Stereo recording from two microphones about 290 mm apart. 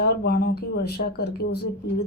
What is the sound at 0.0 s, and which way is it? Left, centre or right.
A woman's voice, left.